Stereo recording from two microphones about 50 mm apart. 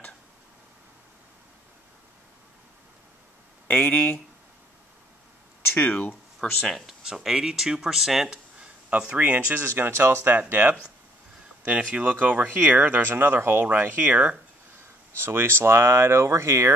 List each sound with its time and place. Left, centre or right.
3.6 s speech: left
5.8 s speech: left
6.6 s speech: centre
7.2 s speech: centre
8.5 s a sound: right
9.2 s speech: right
9.6 s speech: right
10.5 s speech: right
13.1 s speech: right
14.1 s speech: right
15.1 s speech: right